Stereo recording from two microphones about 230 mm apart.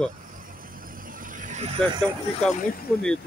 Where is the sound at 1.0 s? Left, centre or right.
Right.